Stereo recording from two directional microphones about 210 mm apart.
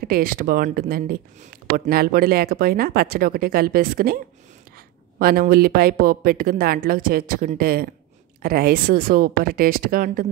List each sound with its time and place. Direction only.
0.0 s speech: 45° right (ahead or behind)
5.2 s speech: 45° right (ahead or behind)